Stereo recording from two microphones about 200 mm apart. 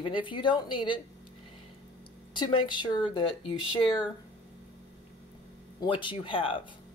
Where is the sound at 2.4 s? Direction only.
25° left (ahead or behind).